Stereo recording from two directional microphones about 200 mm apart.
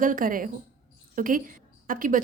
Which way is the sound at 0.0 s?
40° right (ahead or behind).